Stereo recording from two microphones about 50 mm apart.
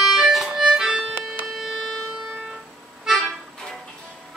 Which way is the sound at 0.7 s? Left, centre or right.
Centre.